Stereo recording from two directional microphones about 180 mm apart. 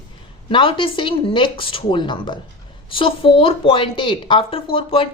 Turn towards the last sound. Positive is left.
turn(degrees=30)  # may be behind; listen again after turning